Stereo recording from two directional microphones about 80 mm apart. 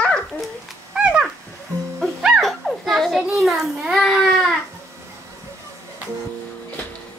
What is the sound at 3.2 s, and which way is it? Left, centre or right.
A child's voice, centre.